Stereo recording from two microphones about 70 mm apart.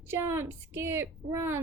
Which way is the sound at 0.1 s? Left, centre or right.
Right.